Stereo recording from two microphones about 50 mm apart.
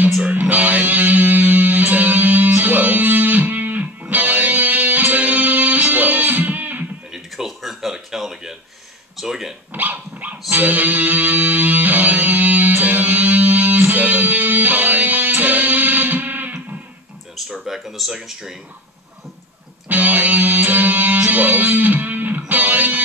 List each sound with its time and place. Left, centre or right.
0.3 s music: right
7.2 s a sound: centre
9.1 s speech: centre
9.7 s dog: right
10.5 s music: right
17.5 s speech: centre
19.9 s music: right